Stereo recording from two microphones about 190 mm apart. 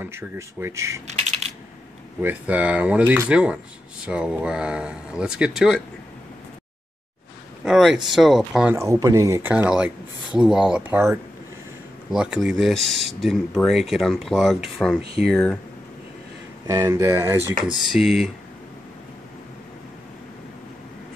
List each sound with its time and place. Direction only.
0.0 s speech: 10° right (ahead or behind)
2.2 s speech: 5° right (ahead or behind)
7.6 s speech: centre (ahead or behind)
8.7 s speech: 15° right (ahead or behind); by 15.6 s 5° left (ahead or behind)
16.6 s speech: 15° right (ahead or behind)
17.8 s speech: centre (ahead or behind)